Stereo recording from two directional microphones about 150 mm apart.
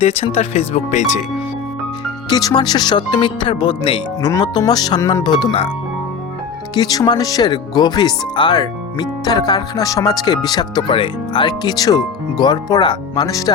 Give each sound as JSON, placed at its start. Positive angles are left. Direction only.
{"t": 0.0, "sound": "speech", "side_deg": 45}
{"t": 2.3, "sound": "speech", "side_deg": 25}
{"t": 4.2, "sound": "speech", "side_deg": 25}
{"t": 6.7, "sound": "speech", "side_deg": 25}